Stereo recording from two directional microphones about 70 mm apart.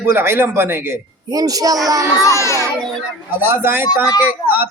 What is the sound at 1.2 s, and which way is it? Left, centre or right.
Speech, right.